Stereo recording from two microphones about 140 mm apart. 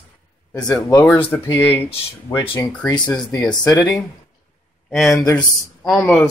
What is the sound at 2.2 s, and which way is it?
Speech, 30° left (ahead or behind).